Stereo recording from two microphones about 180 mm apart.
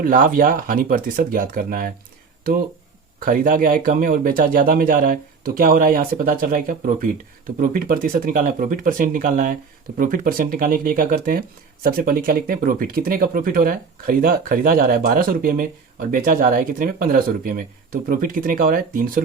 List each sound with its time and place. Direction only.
0.0 s speech: 50° right (ahead or behind)
3.2 s speech: 50° right (ahead or behind)